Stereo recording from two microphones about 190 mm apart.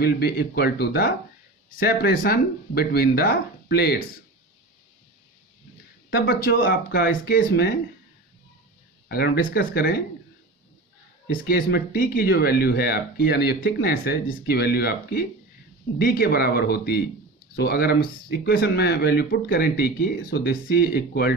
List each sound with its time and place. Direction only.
0.0 s speech: 55° left (ahead or behind)
6.0 s speech: 55° left (ahead or behind)
9.1 s speech: 55° left (ahead or behind)
11.2 s speech: 50° left (ahead or behind)